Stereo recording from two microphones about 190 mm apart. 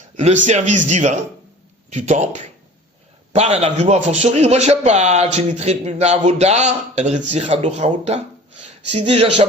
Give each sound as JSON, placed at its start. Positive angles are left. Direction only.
{"t": 0.4, "sound": "speech", "side_deg": -40}